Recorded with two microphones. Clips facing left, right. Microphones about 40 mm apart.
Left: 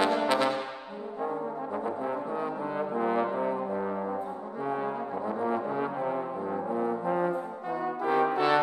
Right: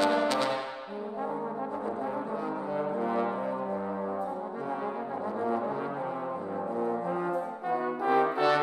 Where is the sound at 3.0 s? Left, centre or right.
Centre.